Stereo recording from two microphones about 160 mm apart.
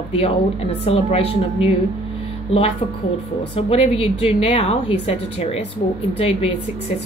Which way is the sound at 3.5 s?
35° left (ahead or behind).